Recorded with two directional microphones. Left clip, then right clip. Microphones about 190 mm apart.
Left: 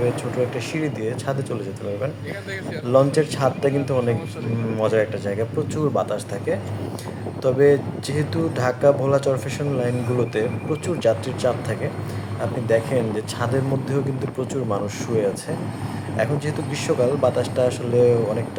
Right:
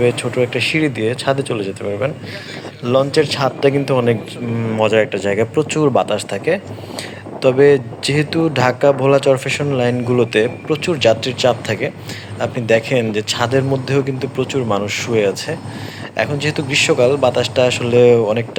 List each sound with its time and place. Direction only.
0.5 s speech: 25° right (ahead or behind)
2.8 s a man's voice: 10° right (ahead or behind)
4.9 s speech: 35° right (ahead or behind)
5.5 s a man's voice: 25° right (ahead or behind)